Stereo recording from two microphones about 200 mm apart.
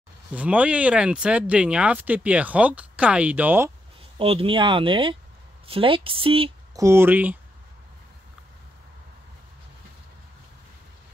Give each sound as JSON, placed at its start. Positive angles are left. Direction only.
{"t": 0.3, "sound": "speech", "side_deg": -5}
{"t": 4.2, "sound": "speech", "side_deg": -30}
{"t": 6.8, "sound": "speech", "side_deg": -10}